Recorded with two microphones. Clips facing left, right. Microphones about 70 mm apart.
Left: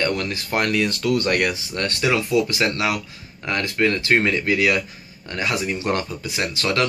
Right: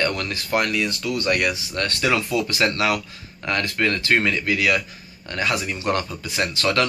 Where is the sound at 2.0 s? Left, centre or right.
Centre.